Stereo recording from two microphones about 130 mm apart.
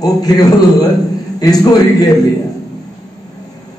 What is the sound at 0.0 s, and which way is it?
A man's voice, 30° left (ahead or behind).